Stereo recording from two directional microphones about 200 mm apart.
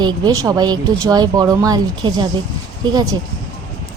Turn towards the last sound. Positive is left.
turn(degrees=-20)  # may be behind; listen again after turning